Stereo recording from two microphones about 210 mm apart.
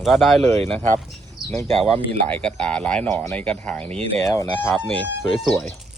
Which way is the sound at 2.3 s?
5° left (ahead or behind).